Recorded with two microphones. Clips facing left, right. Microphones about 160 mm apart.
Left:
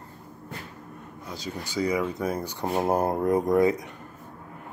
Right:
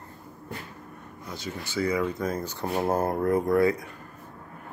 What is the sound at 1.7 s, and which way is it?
Speech, 15° left (ahead or behind).